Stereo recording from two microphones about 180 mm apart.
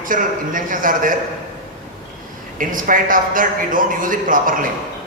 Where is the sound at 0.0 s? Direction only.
50° right (ahead or behind).